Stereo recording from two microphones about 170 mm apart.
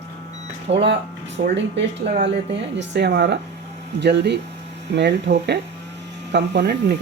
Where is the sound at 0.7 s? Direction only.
40° right (ahead or behind).